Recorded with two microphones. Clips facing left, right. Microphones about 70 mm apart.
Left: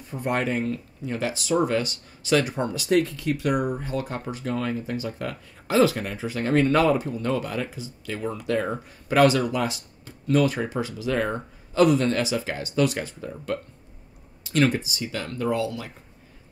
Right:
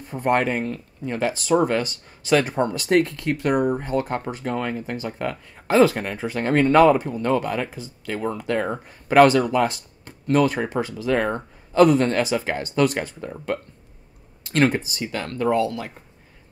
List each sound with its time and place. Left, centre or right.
0.1 s speech: right
14.5 s speech: right